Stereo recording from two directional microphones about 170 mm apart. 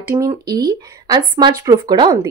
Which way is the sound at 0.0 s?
15° right (ahead or behind).